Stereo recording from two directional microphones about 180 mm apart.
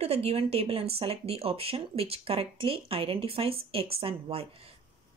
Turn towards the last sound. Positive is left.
turn(degrees=-35)  # may be behind; listen again after turning